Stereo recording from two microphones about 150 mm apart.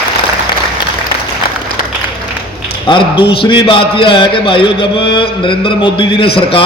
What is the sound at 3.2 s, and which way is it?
Mantra, 35° left (ahead or behind).